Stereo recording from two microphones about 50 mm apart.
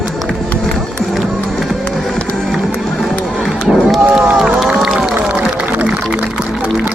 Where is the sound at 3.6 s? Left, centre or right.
Centre.